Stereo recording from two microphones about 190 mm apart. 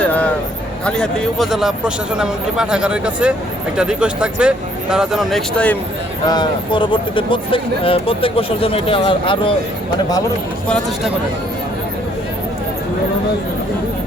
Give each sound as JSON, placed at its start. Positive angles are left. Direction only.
{"t": 0.0, "sound": "a sound", "side_deg": 5}
{"t": 0.9, "sound": "speech", "side_deg": 5}
{"t": 6.2, "sound": "speech", "side_deg": 20}